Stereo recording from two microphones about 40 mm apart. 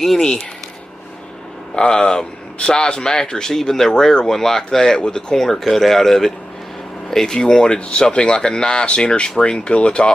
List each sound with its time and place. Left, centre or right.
1.8 s speech: left
5.4 s speech: centre; by 10.1 s left